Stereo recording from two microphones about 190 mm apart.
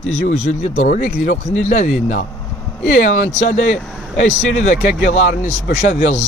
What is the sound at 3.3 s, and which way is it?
Speech, 35° left (ahead or behind).